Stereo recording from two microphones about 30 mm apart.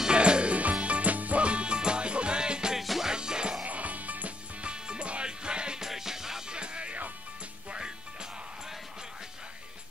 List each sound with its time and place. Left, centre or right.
0.1 s music: right
1.4 s music: right
3.6 s music: right
4.6 s music: right
5.8 s music: centre
6.5 s music: right